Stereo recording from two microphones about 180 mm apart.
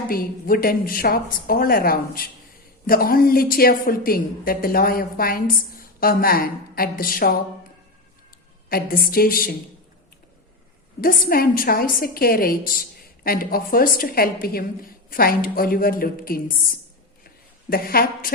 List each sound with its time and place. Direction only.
0.1 s a woman's voice: 55° left (ahead or behind)
8.7 s a woman's voice: 55° left (ahead or behind)
11.0 s a woman's voice: 55° left (ahead or behind)
17.2 s a sound: 55° left (ahead or behind)